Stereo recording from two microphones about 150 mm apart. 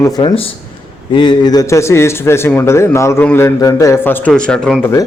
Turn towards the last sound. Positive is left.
turn(degrees=5)  # may be behind; listen again after turning